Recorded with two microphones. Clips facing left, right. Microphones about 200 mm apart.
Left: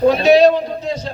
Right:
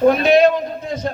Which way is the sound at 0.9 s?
55° right (ahead or behind).